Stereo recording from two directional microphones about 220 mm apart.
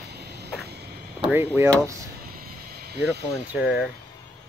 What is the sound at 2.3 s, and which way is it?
Vehicle, 40° right (ahead or behind).